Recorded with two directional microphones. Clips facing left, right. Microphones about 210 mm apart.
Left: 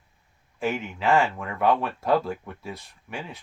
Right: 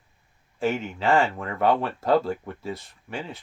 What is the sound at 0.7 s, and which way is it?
Speech, 30° right (ahead or behind).